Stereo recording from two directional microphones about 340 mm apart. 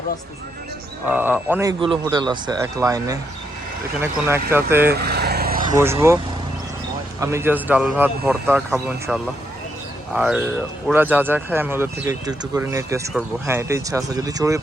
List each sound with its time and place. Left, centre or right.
1.0 s speech: centre
4.7 s speech: centre
4.9 s vehicle: right
5.7 s speech: centre
7.2 s speech: centre